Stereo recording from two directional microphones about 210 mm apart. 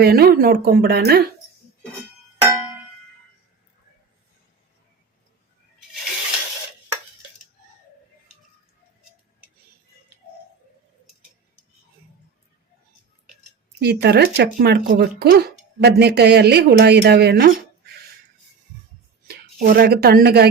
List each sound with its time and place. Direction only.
0.0 s speech: 50° right (ahead or behind)
13.7 s speech: 50° right (ahead or behind)
19.3 s speech: 45° right (ahead or behind)